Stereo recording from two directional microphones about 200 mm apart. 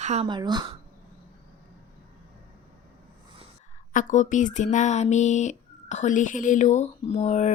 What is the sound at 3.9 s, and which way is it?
Speech, 40° left (ahead or behind).